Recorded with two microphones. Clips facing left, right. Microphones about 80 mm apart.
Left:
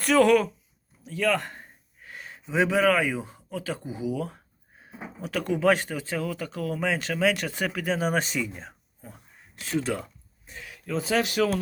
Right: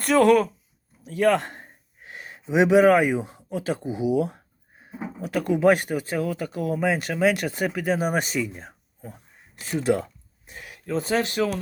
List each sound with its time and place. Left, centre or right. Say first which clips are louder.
0.1 s speech: right 1 dB; centre
1.0 s speech: right 5 dB; right
1.4 s a sound: right 2 dB; right
2.1 s speech: right 4 dB; right
5.2 s speech: right 4 dB; centre
10.5 s a sound: right 1 dB; right
11.1 s speech: even; right